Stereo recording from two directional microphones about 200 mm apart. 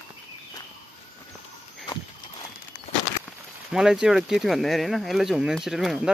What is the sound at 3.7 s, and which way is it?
Speech, 5° right (ahead or behind).